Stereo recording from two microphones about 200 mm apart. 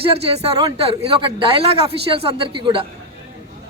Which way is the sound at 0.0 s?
30° right (ahead or behind).